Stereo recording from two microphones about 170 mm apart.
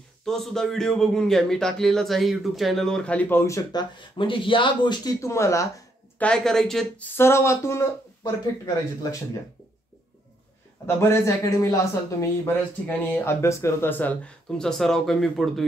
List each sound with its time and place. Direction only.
0.2 s a man's voice: centre (ahead or behind)
6.1 s a man's voice: 5° left (ahead or behind)
7.2 s a man's voice: 15° left (ahead or behind)
11.0 s a man's voice: 20° left (ahead or behind); by 15.6 s centre (ahead or behind)